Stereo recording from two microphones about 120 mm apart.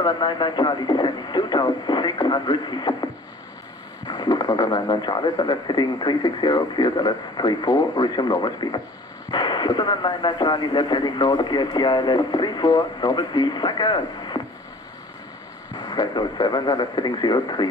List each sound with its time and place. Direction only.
0.0 s speech: 35° left (ahead or behind)
15.7 s speech: 35° left (ahead or behind)